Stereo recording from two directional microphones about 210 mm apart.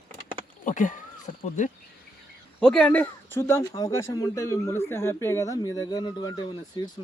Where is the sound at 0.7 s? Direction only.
40° left (ahead or behind).